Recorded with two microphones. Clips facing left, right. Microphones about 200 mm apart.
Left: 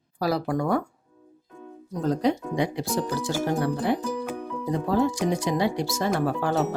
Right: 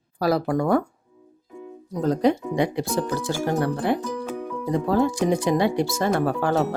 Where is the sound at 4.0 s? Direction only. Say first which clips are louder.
Even; 5° left (ahead or behind).